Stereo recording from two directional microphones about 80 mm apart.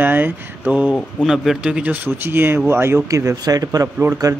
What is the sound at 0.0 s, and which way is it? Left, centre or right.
Speech, right.